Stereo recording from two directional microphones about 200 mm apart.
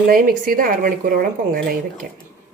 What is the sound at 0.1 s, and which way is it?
A woman's voice, 45° right (ahead or behind).